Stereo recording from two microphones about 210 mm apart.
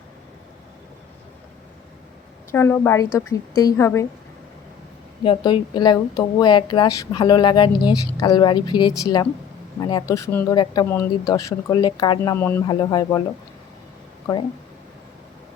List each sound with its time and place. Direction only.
2.5 s speech: 10° left (ahead or behind)
5.2 s speech: 25° left (ahead or behind)